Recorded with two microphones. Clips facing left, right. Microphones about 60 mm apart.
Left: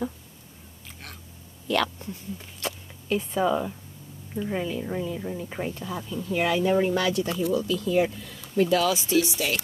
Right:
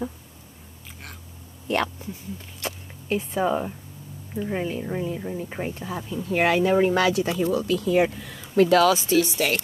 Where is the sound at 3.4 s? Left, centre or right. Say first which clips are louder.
Even; right.